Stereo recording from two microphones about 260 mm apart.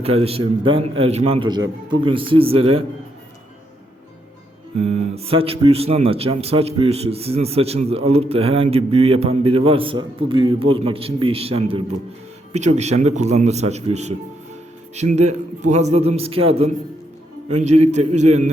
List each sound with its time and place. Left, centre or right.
0.0 s speech: right
4.8 s speech: right